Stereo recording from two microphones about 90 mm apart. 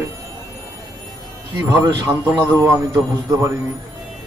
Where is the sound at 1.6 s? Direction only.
40° right (ahead or behind).